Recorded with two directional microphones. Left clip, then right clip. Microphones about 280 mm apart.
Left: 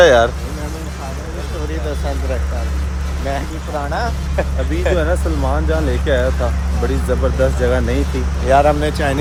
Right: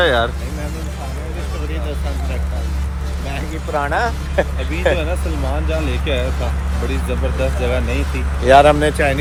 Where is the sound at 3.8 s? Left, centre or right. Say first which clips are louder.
Right 3 dB; right.